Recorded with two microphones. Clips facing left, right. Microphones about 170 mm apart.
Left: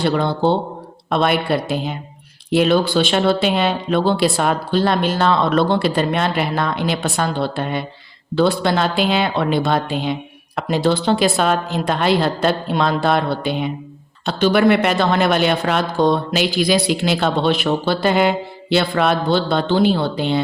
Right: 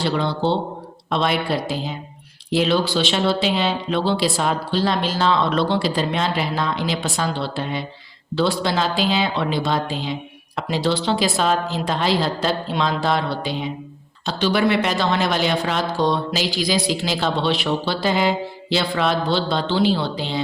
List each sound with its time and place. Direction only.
0.0 s speech: 50° left (ahead or behind)